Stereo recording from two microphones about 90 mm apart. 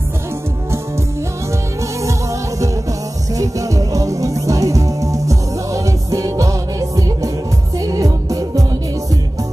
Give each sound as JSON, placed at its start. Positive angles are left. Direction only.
{"t": 3.3, "sound": "music", "side_deg": -40}